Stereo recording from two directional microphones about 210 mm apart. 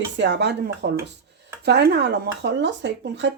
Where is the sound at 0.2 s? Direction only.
55° right (ahead or behind).